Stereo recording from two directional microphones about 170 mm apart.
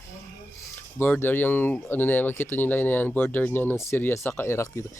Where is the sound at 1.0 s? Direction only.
10° left (ahead or behind).